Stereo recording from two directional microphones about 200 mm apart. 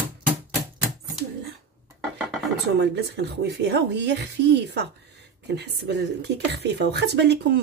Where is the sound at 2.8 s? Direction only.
60° right (ahead or behind).